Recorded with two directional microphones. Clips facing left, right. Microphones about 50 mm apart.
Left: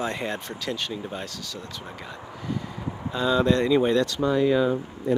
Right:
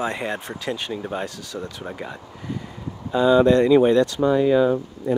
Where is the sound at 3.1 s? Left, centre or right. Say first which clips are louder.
Right 7 dB; centre.